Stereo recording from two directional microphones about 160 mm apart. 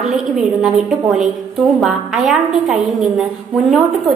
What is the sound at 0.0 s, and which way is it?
A woman's voice, centre (ahead or behind).